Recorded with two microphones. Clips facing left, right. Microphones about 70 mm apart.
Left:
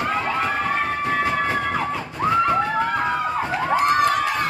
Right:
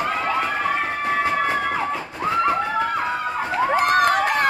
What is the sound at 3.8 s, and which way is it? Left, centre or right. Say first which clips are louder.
Crowd: even; right.